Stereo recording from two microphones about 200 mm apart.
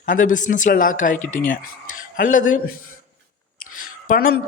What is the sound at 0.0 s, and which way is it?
A man's voice, 40° left (ahead or behind).